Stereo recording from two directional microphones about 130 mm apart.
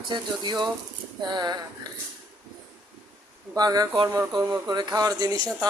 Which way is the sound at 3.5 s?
30° right (ahead or behind).